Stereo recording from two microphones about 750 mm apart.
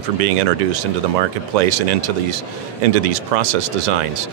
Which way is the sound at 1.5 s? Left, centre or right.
Right.